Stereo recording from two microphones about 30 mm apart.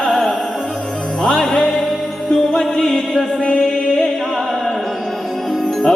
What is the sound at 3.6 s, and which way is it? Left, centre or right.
A capella, centre.